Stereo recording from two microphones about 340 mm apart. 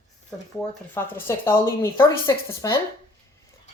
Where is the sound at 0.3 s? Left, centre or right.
Centre.